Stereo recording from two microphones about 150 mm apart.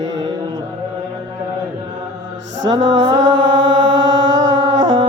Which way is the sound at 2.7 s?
30° right (ahead or behind).